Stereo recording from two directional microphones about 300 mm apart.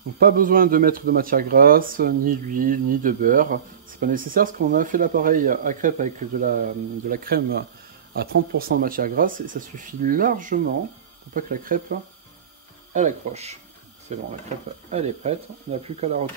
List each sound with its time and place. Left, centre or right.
0.2 s speech: right